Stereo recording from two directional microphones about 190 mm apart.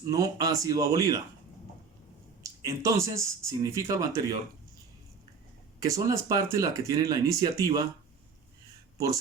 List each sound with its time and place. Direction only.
0.1 s speech: 20° right (ahead or behind)
2.4 s speech: 15° right (ahead or behind)
5.8 s speech: 15° right (ahead or behind)